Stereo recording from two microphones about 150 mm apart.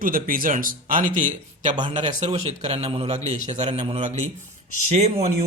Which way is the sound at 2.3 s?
40° right (ahead or behind).